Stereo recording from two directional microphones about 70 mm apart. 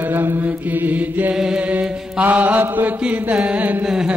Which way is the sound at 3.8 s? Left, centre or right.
Centre.